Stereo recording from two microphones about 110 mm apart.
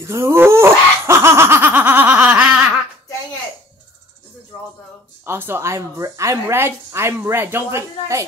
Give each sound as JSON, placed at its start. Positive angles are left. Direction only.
{"t": 0.0, "sound": "laughter", "side_deg": -25}
{"t": 5.2, "sound": "speech", "side_deg": -20}